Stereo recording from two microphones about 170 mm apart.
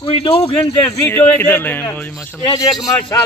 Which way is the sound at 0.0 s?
30° left (ahead or behind).